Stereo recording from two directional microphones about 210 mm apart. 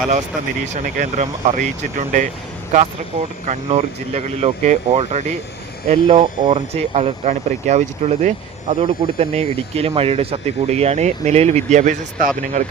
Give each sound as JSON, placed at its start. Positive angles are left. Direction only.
{"t": 0.7, "sound": "speech", "side_deg": -40}
{"t": 3.4, "sound": "speech", "side_deg": -30}